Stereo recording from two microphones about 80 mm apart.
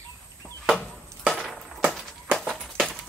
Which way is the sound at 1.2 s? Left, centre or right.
Centre.